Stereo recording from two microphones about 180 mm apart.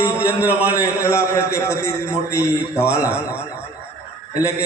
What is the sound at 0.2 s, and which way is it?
Speech, 10° right (ahead or behind).